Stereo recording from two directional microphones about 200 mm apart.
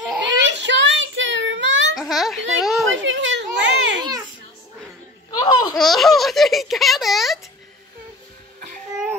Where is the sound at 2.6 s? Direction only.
Centre (ahead or behind).